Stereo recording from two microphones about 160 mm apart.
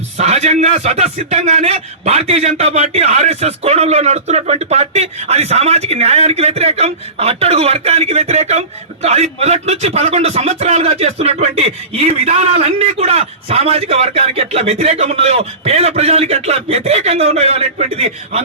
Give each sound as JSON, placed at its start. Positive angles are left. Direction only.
{"t": 0.2, "sound": "a man's voice", "side_deg": -45}